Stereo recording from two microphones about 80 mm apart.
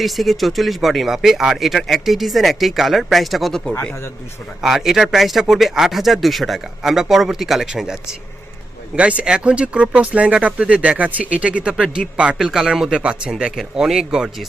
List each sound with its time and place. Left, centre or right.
0.0 s speech: centre
12.5 s speech: centre